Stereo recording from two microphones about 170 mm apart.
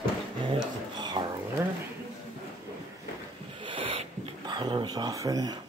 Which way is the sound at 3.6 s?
30° right (ahead or behind).